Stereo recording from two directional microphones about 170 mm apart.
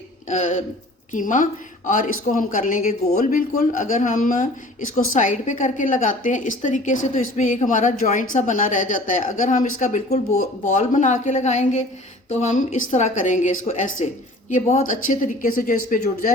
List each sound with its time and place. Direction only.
0.3 s speech: 45° left (ahead or behind)